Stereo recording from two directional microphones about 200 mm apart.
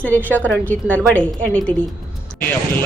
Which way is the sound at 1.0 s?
5° left (ahead or behind).